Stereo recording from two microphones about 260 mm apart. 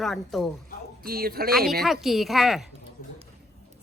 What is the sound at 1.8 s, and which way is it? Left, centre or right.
Speech, centre.